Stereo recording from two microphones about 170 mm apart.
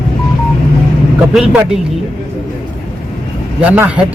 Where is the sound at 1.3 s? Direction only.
5° right (ahead or behind).